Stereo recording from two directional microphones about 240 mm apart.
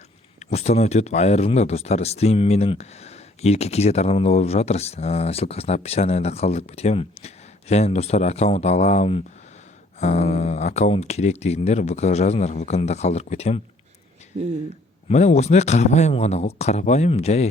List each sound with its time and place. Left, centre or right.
0.5 s speech: left
14.3 s speech: right
15.1 s speech: left